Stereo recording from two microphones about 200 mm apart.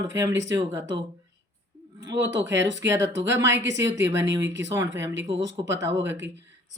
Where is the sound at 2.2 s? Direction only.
60° right (ahead or behind).